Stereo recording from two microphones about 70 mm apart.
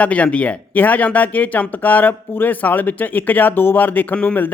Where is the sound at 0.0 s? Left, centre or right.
Centre.